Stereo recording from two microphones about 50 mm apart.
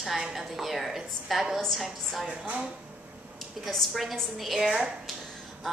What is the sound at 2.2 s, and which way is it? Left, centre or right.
Speech, centre.